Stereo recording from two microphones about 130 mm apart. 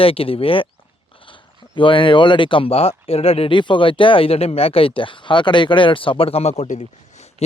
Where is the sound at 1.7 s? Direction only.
40° left (ahead or behind).